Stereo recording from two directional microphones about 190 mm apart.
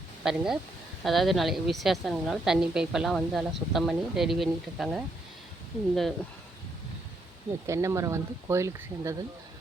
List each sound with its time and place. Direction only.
0.2 s a woman's voice: centre (ahead or behind)
7.7 s speech: 15° right (ahead or behind)